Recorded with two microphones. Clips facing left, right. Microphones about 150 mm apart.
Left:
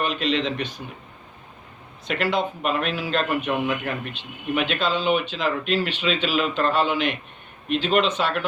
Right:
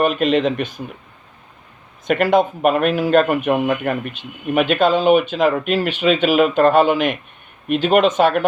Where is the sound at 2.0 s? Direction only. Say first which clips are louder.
Right 9 dB; 50° right (ahead or behind).